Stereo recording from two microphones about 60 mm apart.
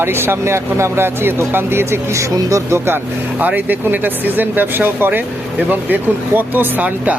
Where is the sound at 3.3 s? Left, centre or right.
Right.